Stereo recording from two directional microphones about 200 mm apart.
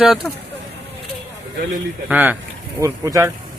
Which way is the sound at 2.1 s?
10° right (ahead or behind).